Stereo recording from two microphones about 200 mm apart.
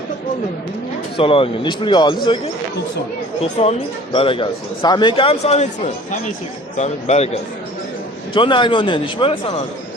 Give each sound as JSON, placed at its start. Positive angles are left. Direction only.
{"t": 1.1, "sound": "speech", "side_deg": 25}
{"t": 3.6, "sound": "speech", "side_deg": 30}
{"t": 8.3, "sound": "speech", "side_deg": 25}